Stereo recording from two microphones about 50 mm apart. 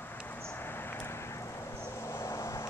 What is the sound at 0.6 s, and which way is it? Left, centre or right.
Vehicle, left.